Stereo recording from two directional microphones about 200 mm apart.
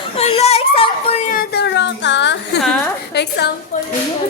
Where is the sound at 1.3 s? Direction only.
50° left (ahead or behind).